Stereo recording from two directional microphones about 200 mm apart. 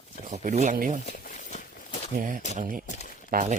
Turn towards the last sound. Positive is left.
turn(degrees=-40)  # may be behind; listen again after turning